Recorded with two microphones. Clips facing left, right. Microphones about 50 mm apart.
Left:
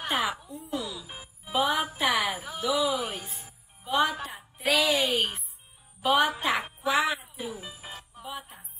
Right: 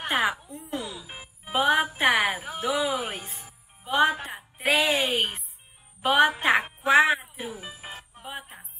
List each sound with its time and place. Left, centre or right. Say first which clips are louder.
0.0 s a sound: right 3 dB; right
0.5 s a woman's voice: even; right
0.8 s music: even; right
1.4 s music: right 4 dB; right
2.0 s a woman's voice: right 4 dB; right
7.9 s music: left 1 dB; right